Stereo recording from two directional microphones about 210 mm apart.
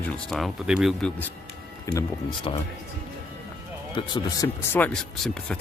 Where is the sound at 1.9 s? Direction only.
15° left (ahead or behind).